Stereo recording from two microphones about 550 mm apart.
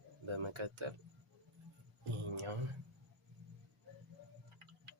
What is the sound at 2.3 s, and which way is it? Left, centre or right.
Speech, right.